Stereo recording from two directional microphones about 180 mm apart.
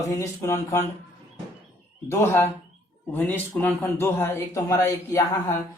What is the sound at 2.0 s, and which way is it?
A man's voice, 15° left (ahead or behind).